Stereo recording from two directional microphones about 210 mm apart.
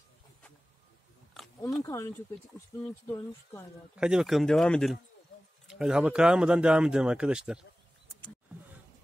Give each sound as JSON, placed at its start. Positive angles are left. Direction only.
{"t": 1.8, "sound": "speech", "side_deg": 15}
{"t": 3.9, "sound": "speech", "side_deg": -5}